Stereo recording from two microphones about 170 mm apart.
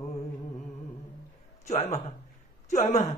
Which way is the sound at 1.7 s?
40° left (ahead or behind).